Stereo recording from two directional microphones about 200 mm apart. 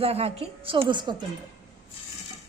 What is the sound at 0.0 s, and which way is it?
A woman's voice, 30° right (ahead or behind).